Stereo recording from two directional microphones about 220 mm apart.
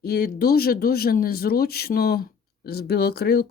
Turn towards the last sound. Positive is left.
turn(degrees=45)  # may be behind; listen again after turning